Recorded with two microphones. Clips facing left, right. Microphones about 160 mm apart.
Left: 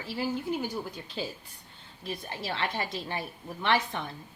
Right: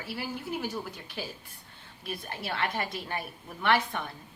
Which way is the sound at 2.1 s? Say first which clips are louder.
Left 1 dB; 20° left (ahead or behind).